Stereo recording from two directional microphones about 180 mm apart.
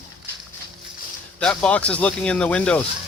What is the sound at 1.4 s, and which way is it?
Speech, 5° left (ahead or behind).